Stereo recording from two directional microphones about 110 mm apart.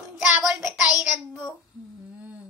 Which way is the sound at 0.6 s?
5° right (ahead or behind).